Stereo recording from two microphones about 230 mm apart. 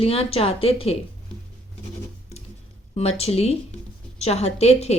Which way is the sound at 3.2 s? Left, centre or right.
Left.